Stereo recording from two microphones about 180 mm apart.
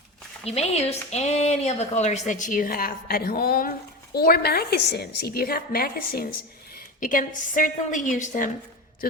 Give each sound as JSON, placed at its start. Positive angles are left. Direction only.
{"t": 0.4, "sound": "a woman's voice", "side_deg": 35}